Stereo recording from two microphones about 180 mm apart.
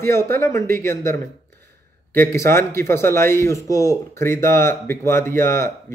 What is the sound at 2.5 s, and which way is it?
A man's voice, 15° left (ahead or behind).